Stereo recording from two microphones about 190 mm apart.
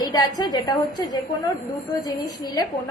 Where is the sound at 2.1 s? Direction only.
20° left (ahead or behind).